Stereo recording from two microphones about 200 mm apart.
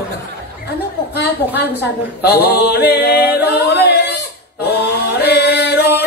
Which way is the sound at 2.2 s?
55° left (ahead or behind).